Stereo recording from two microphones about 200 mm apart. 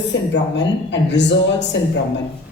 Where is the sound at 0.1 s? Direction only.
60° left (ahead or behind).